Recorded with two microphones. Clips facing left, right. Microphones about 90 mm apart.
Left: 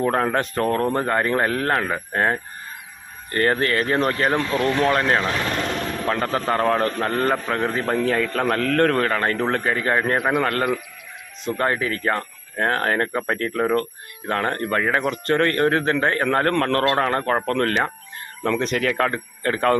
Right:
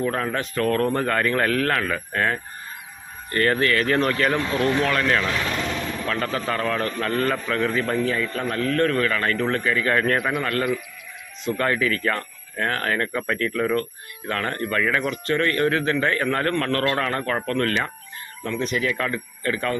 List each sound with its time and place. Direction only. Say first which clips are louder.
0.0 s a man's voice: left 4 dB; 40° left (ahead or behind)
9.9 s speech: even; 25° left (ahead or behind)
10.2 s speech: left 3 dB; 45° left (ahead or behind)
11.5 s a man's voice: even; 30° left (ahead or behind); by 17.0 s 45° left (ahead or behind)
17.0 s a man's voice: left 4 dB; 35° left (ahead or behind)
18.4 s speech: left 3 dB; 65° left (ahead or behind); by 19.7 s 40° left (ahead or behind)